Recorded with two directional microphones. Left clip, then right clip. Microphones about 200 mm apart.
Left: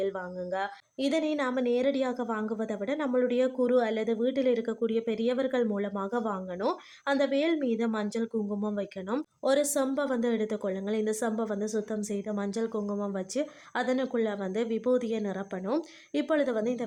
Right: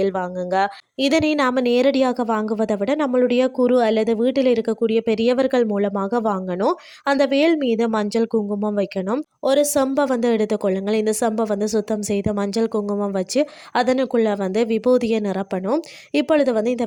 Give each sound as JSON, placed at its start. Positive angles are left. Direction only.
{"t": 0.5, "sound": "a woman's voice", "side_deg": -45}